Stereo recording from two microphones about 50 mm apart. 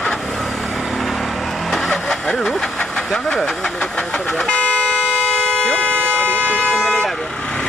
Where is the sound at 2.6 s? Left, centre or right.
Centre.